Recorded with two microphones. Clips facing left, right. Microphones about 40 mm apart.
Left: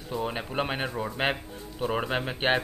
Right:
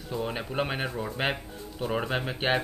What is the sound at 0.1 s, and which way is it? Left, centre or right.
A man's voice, centre.